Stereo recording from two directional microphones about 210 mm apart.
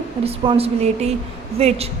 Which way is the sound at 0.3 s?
30° right (ahead or behind).